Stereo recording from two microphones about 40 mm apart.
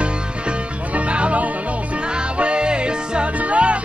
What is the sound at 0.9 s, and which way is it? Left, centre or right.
Music, right.